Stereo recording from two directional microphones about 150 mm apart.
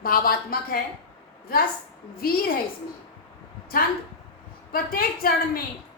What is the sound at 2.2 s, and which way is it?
Speech, 75° left (ahead or behind).